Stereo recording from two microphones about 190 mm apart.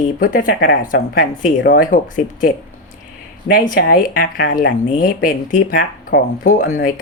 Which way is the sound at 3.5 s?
45° left (ahead or behind).